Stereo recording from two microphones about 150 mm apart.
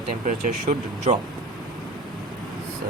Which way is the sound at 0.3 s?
60° right (ahead or behind).